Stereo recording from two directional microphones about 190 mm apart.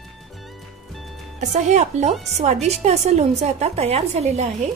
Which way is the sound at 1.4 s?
35° right (ahead or behind).